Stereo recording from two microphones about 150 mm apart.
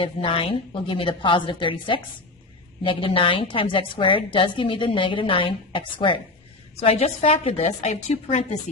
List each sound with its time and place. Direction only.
0.0 s a woman's voice: 35° left (ahead or behind); by 8.5 s 50° left (ahead or behind)